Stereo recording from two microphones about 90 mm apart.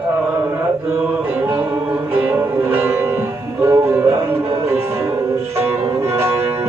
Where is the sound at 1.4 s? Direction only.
20° right (ahead or behind).